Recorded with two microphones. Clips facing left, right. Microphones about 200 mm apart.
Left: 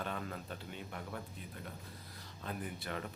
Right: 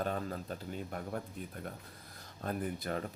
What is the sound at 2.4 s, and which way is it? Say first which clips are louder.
Speech: right 6 dB; 40° right (ahead or behind).